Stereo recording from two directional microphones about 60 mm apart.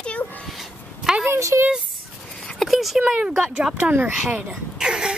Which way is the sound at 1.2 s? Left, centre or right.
Right.